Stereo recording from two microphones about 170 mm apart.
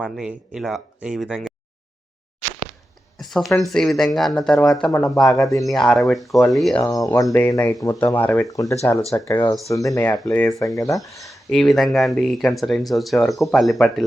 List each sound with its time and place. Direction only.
0.0 s speech: 5° right (ahead or behind)
3.2 s speech: centre (ahead or behind)
5.4 s speech: 20° left (ahead or behind)
5.6 s speech: centre (ahead or behind)
6.8 s speech: 15° left (ahead or behind)
11.3 s speech: centre (ahead or behind)